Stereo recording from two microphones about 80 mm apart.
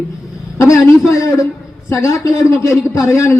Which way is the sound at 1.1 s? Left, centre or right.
Left.